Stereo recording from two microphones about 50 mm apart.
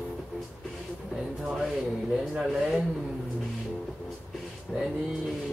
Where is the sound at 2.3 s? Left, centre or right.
Centre.